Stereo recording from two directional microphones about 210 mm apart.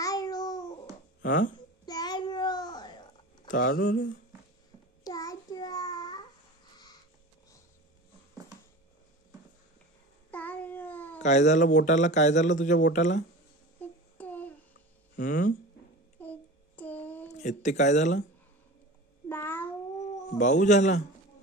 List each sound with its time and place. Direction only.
0.0 s babbling: 15° left (ahead or behind)
1.2 s speech: 40° left (ahead or behind)
1.9 s a sound: 20° left (ahead or behind)
3.4 s speech: 40° left (ahead or behind)
5.0 s child singing: 15° left (ahead or behind)
10.3 s babbling: 5° left (ahead or behind)
11.1 s speech: 35° left (ahead or behind)
14.1 s child singing: 5° left (ahead or behind)
15.1 s a sound: 40° left (ahead or behind)
16.2 s child singing: 5° left (ahead or behind)
17.4 s speech: 35° left (ahead or behind)
19.2 s babbling: 10° left (ahead or behind)
20.2 s a man's voice: 35° left (ahead or behind)